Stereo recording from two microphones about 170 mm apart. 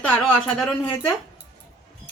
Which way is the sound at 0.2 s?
5° left (ahead or behind).